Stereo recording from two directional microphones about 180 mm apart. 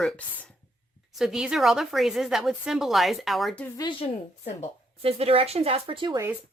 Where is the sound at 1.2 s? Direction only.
5° right (ahead or behind).